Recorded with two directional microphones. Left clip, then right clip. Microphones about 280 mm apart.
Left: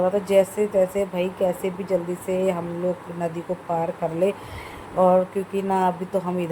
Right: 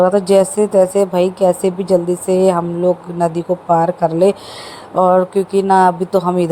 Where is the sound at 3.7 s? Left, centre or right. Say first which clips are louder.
Right 12 dB; right.